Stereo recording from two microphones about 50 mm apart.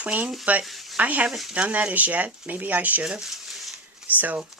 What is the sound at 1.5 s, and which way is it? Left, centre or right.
Speech, right.